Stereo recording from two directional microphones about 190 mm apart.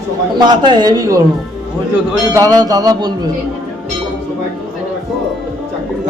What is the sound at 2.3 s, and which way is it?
Speech, 20° right (ahead or behind).